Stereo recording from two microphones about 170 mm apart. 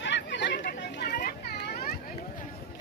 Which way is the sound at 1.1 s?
65° left (ahead or behind).